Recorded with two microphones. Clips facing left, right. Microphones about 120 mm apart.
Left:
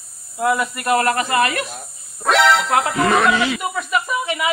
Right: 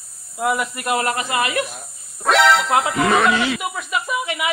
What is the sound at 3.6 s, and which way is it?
Speech, 15° right (ahead or behind).